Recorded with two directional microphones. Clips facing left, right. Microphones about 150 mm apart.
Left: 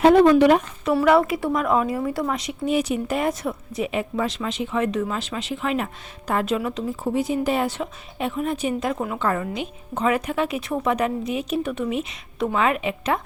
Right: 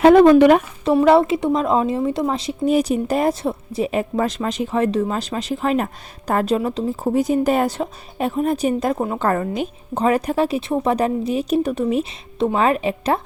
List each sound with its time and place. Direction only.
0.0 s speech: 75° right (ahead or behind)
0.3 s speech: 60° right (ahead or behind)
0.9 s a woman's voice: 30° right (ahead or behind)